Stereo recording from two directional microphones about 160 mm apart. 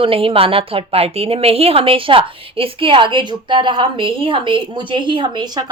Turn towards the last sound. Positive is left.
turn(degrees=-25)  # may be behind; listen again after turning